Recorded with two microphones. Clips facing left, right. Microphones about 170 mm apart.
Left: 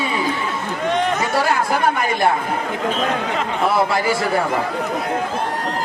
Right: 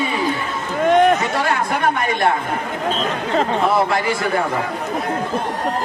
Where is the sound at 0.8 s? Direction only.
50° right (ahead or behind).